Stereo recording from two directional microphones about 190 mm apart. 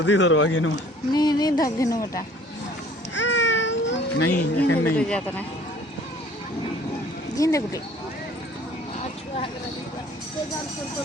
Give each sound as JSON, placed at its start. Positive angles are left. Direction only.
{"t": 0.0, "sound": "speech", "side_deg": 75}
{"t": 1.1, "sound": "a sound", "side_deg": 20}
{"t": 1.8, "sound": "speech", "side_deg": 15}
{"t": 3.2, "sound": "a sound", "side_deg": 75}
{"t": 4.9, "sound": "speech", "side_deg": 5}
{"t": 7.3, "sound": "speech", "side_deg": 20}